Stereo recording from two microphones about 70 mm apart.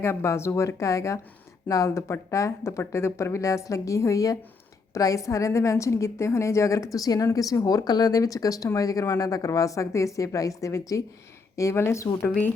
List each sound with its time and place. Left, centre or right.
0.0 s speech: left